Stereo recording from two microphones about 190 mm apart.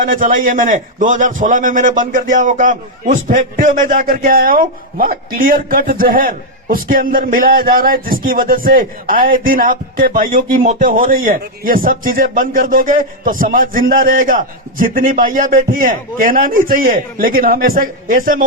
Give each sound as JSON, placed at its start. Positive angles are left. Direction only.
{"t": 0.0, "sound": "a man's voice", "side_deg": -45}